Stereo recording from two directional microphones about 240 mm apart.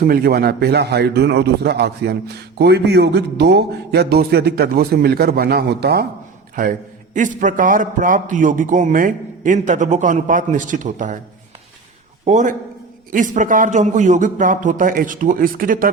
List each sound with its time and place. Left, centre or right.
0.1 s a man's voice: right
12.2 s a man's voice: right